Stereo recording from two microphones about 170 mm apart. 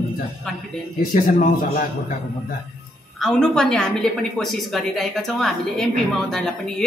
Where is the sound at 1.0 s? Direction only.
50° left (ahead or behind).